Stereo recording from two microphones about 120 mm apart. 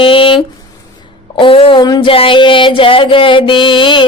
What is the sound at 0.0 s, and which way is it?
Speech, 50° left (ahead or behind).